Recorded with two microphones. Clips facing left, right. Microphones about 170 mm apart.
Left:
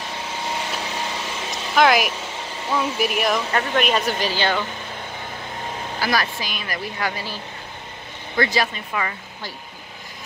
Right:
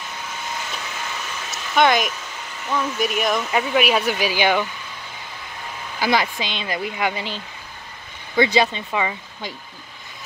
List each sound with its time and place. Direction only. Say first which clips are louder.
0.3 s a sound: left 4 dB; 30° left (ahead or behind)
1.5 s a sound: even; centre (ahead or behind)
3.0 s speech: right 1 dB; 5° left (ahead or behind)
3.5 s speech: right 1 dB; 5° right (ahead or behind)
5.9 s speech: right 3 dB; 20° right (ahead or behind)
8.4 s speech: right 4 dB; 20° right (ahead or behind)